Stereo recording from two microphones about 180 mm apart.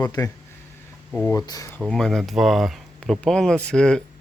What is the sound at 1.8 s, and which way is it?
Speech, centre (ahead or behind).